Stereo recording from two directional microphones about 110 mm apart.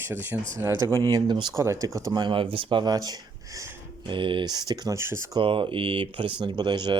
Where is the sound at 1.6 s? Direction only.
30° right (ahead or behind).